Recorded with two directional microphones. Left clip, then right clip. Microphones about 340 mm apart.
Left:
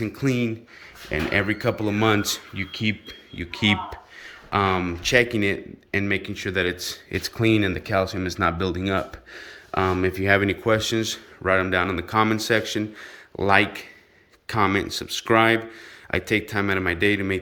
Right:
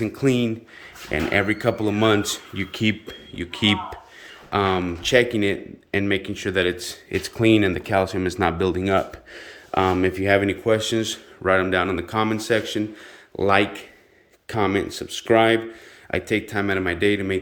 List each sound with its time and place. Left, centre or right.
0.0 s speech: centre